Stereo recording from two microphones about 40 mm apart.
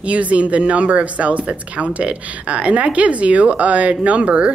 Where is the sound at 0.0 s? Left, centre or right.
Right.